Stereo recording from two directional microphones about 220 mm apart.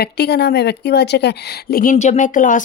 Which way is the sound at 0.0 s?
50° left (ahead or behind).